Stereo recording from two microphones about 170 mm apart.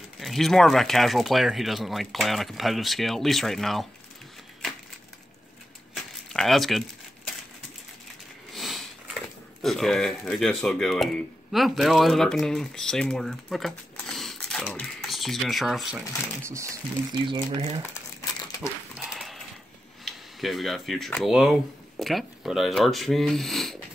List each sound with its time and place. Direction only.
0.2 s speech: centre (ahead or behind)
6.2 s speech: centre (ahead or behind)
8.5 s sniff: centre (ahead or behind)
9.6 s speech: centre (ahead or behind)
14.0 s typing: centre (ahead or behind)
16.4 s speech: 20° right (ahead or behind)
17.6 s speech: 35° right (ahead or behind)
18.9 s horse: 5° right (ahead or behind)
20.1 s speech: centre (ahead or behind)